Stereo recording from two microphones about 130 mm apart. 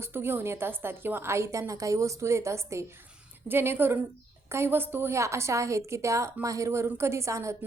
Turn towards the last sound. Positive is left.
turn(degrees=-25)  # may be behind; listen again after turning